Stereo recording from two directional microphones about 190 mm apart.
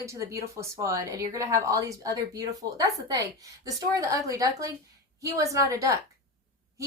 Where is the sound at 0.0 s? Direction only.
15° right (ahead or behind).